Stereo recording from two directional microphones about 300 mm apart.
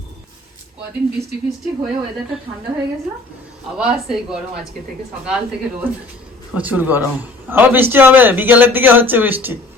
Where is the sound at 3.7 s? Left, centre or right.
Centre.